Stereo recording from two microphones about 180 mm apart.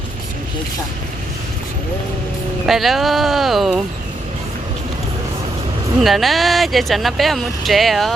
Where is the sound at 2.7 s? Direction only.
Centre (ahead or behind).